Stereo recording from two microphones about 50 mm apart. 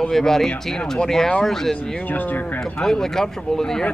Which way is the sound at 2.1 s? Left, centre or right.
Left.